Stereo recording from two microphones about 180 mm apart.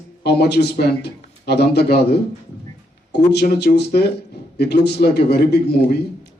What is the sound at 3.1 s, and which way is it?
A man's voice, 65° left (ahead or behind).